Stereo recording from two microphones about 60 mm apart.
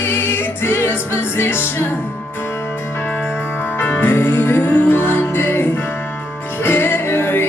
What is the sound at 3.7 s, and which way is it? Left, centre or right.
Music, left.